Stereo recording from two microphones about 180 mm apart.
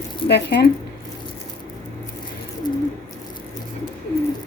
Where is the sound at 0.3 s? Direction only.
65° left (ahead or behind).